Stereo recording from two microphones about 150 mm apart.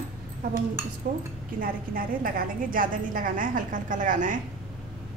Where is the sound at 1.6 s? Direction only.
70° right (ahead or behind).